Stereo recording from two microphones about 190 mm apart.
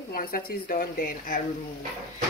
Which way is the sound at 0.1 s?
50° left (ahead or behind).